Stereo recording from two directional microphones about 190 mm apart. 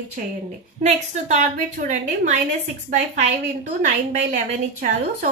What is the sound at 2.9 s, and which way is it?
Speech, 50° right (ahead or behind).